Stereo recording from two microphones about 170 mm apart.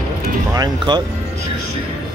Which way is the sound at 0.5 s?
25° right (ahead or behind).